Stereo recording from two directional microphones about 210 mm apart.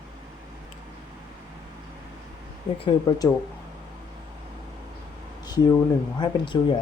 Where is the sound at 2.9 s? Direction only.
20° left (ahead or behind).